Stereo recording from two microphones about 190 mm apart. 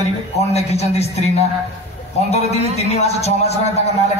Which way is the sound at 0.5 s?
35° left (ahead or behind).